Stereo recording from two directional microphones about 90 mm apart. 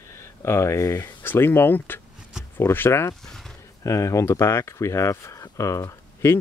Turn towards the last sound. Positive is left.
turn(degrees=35)  # may be behind; listen again after turning